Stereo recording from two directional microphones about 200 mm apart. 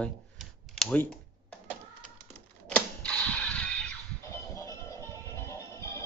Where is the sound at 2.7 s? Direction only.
5° left (ahead or behind).